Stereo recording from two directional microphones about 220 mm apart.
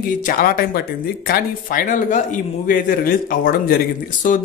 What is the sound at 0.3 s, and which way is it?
Speech, 40° left (ahead or behind).